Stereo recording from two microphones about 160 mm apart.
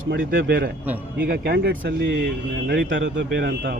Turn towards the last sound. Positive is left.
turn(degrees=-90)